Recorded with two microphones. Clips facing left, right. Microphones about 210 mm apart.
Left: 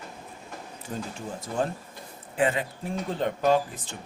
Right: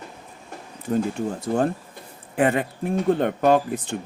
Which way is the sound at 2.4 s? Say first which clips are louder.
Right 5 dB; 60° right (ahead or behind).